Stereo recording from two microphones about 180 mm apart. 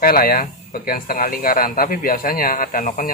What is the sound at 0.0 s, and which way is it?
Speech, 55° left (ahead or behind).